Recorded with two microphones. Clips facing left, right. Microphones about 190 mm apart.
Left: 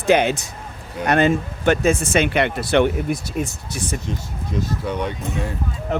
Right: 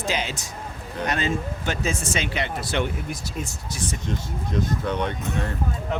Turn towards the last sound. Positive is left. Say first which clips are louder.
# left 2 dB
turn(degrees=10)  # may be behind; listen again after turning